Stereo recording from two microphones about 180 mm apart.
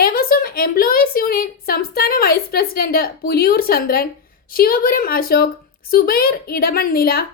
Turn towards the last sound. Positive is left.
turn(degrees=55)  # may be behind; listen again after turning